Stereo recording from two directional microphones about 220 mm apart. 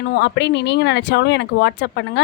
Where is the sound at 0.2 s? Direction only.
50° left (ahead or behind).